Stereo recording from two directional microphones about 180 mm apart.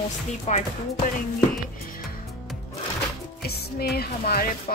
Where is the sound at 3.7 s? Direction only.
60° left (ahead or behind).